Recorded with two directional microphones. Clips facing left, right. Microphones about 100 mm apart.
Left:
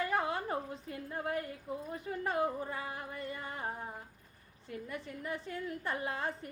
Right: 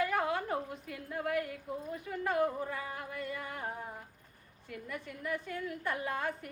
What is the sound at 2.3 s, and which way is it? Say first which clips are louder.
Singing: right 3 dB; 30° left (ahead or behind).